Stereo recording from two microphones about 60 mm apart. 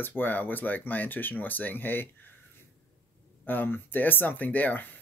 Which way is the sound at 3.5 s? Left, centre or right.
Left.